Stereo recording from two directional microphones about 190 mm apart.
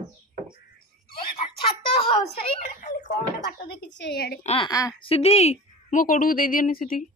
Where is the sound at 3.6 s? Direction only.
60° left (ahead or behind).